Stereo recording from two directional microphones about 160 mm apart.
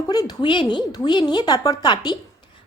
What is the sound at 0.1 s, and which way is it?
A woman's voice, 25° left (ahead or behind).